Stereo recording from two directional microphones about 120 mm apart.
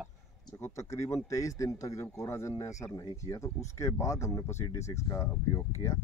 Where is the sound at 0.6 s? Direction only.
25° left (ahead or behind).